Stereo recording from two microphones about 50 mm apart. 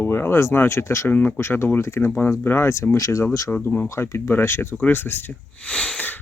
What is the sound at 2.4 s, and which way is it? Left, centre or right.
Speech, left.